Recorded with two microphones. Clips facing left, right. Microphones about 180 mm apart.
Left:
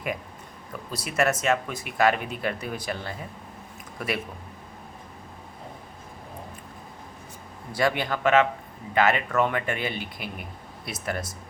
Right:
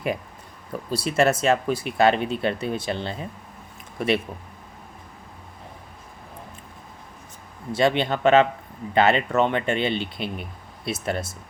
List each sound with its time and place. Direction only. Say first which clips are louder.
0.9 s speech: right 4 dB; 30° right (ahead or behind)
7.7 s speech: right 4 dB; 25° right (ahead or behind)